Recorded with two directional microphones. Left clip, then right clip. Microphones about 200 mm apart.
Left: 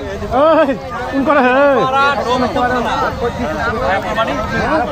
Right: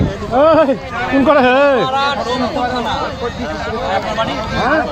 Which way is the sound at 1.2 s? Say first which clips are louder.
Even; 55° right (ahead or behind).